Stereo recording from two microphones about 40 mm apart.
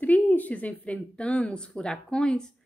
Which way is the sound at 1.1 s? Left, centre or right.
Left.